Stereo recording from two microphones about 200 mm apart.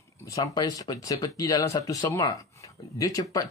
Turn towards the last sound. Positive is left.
turn(degrees=20)  # may be behind; listen again after turning